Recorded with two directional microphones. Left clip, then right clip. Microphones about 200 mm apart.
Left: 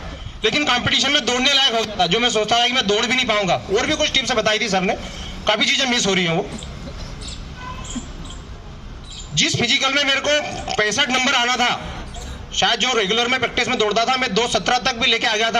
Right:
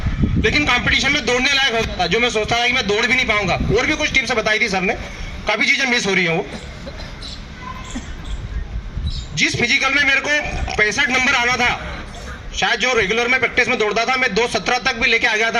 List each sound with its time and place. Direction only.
0.4 s a man's voice: 15° left (ahead or behind)
9.4 s a man's voice: 15° left (ahead or behind)